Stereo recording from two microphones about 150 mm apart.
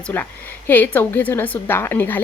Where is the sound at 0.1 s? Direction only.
15° left (ahead or behind).